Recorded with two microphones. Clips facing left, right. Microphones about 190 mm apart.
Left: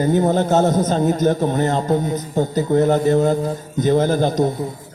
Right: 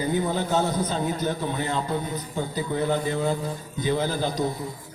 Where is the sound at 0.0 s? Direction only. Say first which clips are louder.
Left 8 dB; 45° left (ahead or behind).